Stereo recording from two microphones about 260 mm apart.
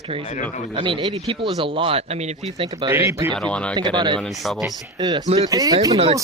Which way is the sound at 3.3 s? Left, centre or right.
Centre.